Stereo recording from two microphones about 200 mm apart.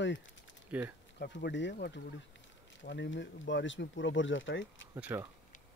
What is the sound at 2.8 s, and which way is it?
Speech, 60° left (ahead or behind).